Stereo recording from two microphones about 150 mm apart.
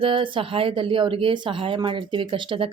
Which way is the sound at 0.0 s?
35° right (ahead or behind).